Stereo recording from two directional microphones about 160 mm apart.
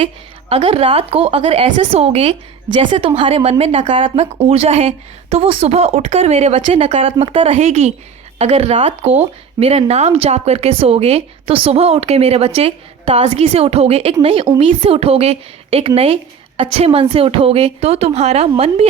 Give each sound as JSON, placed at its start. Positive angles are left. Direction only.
{"t": 0.5, "sound": "a woman's voice", "side_deg": -40}